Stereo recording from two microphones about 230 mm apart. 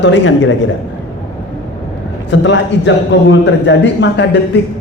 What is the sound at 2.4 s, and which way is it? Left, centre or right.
A man's voice, left.